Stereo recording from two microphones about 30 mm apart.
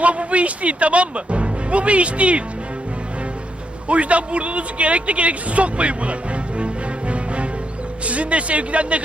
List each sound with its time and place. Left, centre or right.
0.0 s speech: right
3.8 s speech: right
8.0 s speech: right